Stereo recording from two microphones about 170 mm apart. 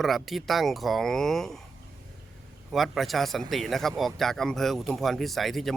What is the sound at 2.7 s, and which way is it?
Speech, centre (ahead or behind).